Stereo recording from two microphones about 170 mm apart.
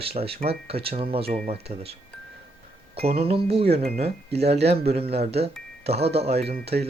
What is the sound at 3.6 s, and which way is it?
Speech, 65° right (ahead or behind).